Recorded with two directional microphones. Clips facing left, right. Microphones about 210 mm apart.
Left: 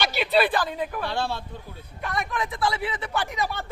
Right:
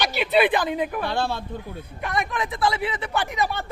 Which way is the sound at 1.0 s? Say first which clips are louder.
Right 3 dB; 50° right (ahead or behind).